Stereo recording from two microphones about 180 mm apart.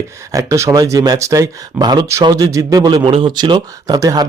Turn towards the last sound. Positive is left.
turn(degrees=-20)  # may be behind; listen again after turning